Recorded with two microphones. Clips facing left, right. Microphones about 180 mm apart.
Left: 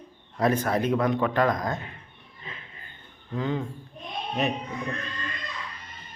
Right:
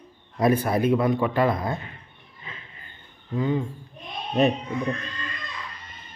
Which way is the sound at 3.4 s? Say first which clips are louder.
Right 4 dB; 5° right (ahead or behind).